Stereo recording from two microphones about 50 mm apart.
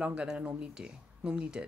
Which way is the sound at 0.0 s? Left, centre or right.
Right.